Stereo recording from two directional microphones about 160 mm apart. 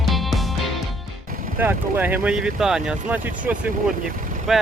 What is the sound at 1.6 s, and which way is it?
Speech, 10° right (ahead or behind).